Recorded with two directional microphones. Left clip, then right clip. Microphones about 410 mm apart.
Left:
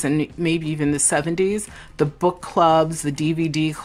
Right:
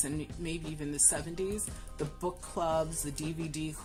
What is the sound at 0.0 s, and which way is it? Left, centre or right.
Speech, right.